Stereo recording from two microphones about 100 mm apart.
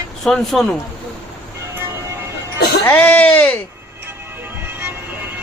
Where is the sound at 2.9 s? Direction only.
15° left (ahead or behind).